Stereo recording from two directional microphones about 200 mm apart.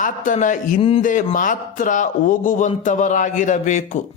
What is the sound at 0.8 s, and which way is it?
Speech, 30° left (ahead or behind).